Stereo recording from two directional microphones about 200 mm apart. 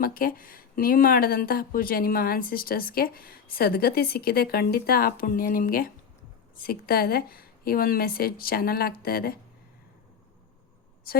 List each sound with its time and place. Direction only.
0.0 s speech: 45° left (ahead or behind)